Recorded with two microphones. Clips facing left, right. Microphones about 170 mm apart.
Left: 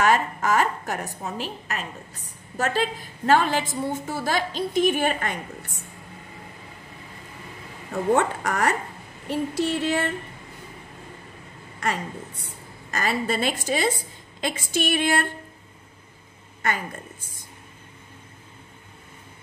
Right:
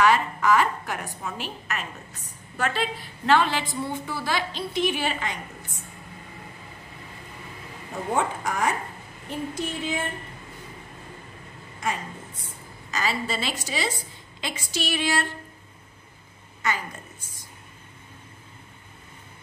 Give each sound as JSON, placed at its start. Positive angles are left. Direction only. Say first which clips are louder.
{"t": 0.0, "sound": "a woman's voice", "louder": "even", "side_deg": 45}
{"t": 8.1, "sound": "a sound", "louder": "left 4 dB", "side_deg": 70}
{"t": 11.8, "sound": "a woman's voice", "louder": "left 2 dB", "side_deg": 65}
{"t": 16.6, "sound": "a woman's voice", "louder": "left 1 dB", "side_deg": 55}